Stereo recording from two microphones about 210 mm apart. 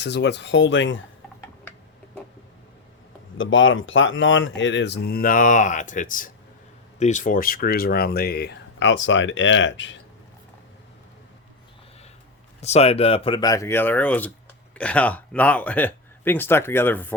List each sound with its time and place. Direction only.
0.0 s speech: 55° left (ahead or behind)
3.3 s speech: 65° left (ahead or behind)
12.5 s speech: 30° left (ahead or behind); by 17.2 s 10° left (ahead or behind)